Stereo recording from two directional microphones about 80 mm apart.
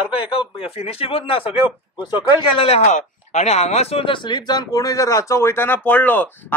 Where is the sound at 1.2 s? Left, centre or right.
Left.